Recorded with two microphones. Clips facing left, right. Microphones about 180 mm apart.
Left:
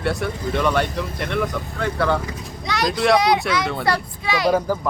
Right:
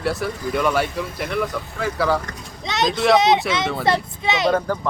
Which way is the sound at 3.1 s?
25° right (ahead or behind).